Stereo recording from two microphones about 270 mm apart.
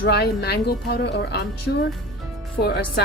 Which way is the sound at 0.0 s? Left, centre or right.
Left.